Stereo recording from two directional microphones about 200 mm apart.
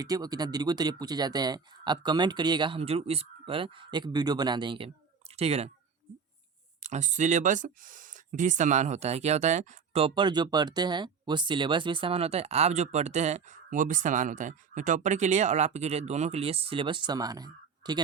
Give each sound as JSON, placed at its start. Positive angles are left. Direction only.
{"t": 0.0, "sound": "speech", "side_deg": -20}
{"t": 6.8, "sound": "speech", "side_deg": -35}